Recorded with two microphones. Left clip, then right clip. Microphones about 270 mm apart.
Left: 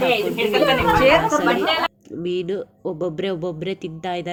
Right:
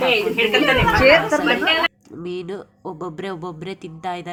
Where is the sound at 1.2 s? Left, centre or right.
Centre.